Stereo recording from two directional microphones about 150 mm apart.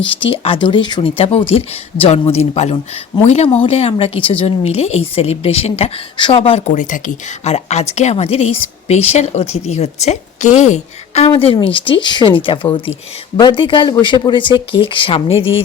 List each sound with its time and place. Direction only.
0.0 s a woman's voice: 35° left (ahead or behind)
6.7 s a woman's voice: 55° left (ahead or behind)
11.3 s a woman's voice: 35° left (ahead or behind)